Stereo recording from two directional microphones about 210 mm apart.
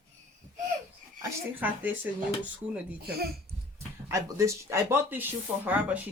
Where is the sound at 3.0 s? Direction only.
45° right (ahead or behind).